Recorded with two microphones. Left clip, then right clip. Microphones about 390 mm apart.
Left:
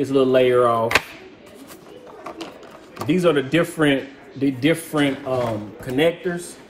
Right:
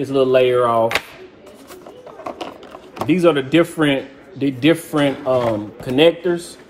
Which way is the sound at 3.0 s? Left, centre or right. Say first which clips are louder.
Right 3 dB; centre.